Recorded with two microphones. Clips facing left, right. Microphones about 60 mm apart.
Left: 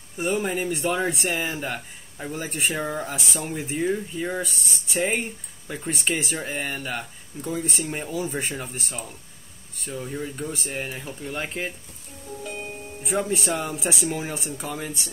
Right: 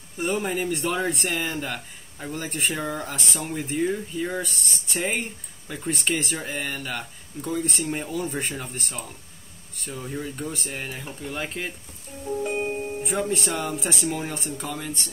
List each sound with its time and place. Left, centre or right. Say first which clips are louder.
0.2 s speech: left 1 dB; centre
12.4 s music: right 7 dB; right
13.0 s speech: left 3 dB; centre